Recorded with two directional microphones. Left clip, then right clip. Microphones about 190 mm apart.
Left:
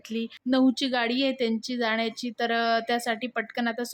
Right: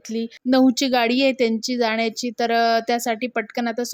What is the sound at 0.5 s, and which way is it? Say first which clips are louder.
A woman's voice: right 7 dB; 25° right (ahead or behind).